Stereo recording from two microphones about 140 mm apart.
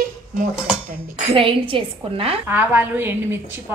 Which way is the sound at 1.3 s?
40° right (ahead or behind).